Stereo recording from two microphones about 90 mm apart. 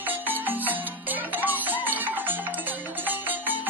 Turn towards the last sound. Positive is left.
turn(degrees=-20)  # may be behind; listen again after turning